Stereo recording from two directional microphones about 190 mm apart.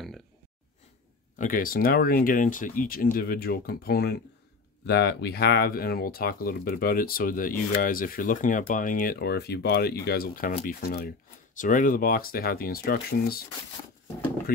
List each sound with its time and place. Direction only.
1.4 s speech: 50° left (ahead or behind)